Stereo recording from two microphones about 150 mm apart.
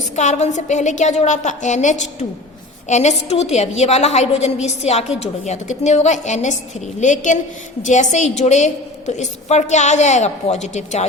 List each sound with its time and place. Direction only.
0.2 s a woman's voice: 50° left (ahead or behind)